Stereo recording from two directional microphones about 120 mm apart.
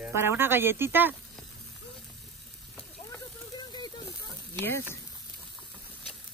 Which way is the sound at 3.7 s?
35° left (ahead or behind).